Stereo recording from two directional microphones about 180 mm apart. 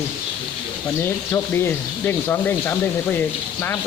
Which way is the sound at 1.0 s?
15° left (ahead or behind).